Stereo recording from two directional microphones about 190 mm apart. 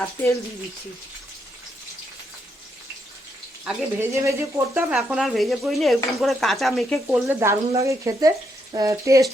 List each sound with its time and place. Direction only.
3.6 s speech: 10° right (ahead or behind)
7.1 s speech: 10° right (ahead or behind)